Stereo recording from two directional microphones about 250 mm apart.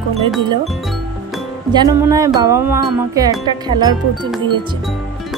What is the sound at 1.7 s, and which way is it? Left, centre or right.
Wind chime, centre.